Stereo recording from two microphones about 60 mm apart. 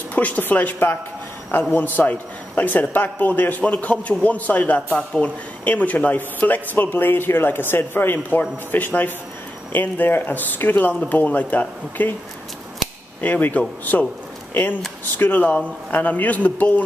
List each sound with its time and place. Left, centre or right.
0.1 s a man's voice: left
4.9 s speech: centre
5.6 s a man's voice: left
13.2 s a man's voice: left